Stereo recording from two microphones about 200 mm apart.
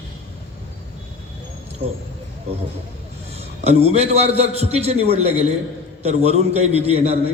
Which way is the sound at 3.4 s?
30° right (ahead or behind).